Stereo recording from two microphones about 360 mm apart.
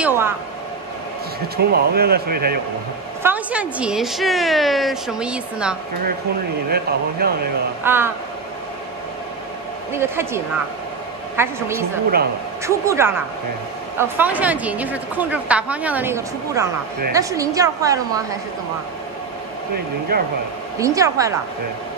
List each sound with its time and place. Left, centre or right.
0.0 s speech: centre
1.6 s speech: right
3.2 s a woman's voice: centre
6.7 s speech: right
7.8 s a woman's voice: centre
9.9 s a woman's voice: centre
20.1 s speech: right
20.8 s a woman's voice: centre